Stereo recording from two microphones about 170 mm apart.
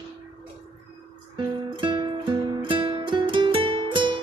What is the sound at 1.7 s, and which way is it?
Music, 30° right (ahead or behind).